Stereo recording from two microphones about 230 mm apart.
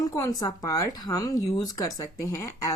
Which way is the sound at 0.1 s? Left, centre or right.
Centre.